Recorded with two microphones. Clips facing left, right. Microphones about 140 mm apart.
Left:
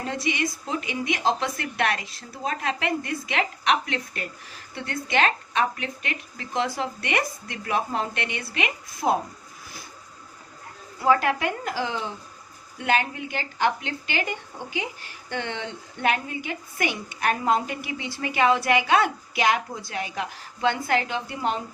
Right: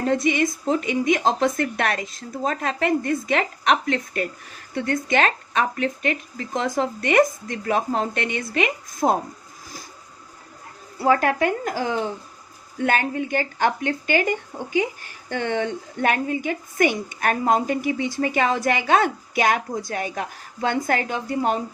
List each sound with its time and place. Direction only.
0.1 s a woman's voice: 50° right (ahead or behind)
11.0 s a woman's voice: 45° right (ahead or behind)